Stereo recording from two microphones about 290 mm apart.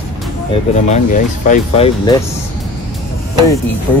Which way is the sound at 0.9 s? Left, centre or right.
Left.